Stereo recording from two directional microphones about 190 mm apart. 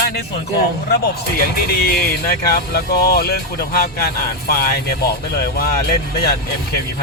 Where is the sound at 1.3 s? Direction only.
55° left (ahead or behind).